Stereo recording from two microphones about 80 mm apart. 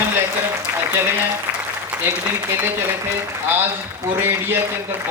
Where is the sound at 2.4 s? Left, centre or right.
Right.